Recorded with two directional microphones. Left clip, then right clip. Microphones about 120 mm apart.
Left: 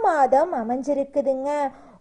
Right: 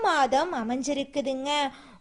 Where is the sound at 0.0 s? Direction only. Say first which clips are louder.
Left 5 dB; 35° right (ahead or behind).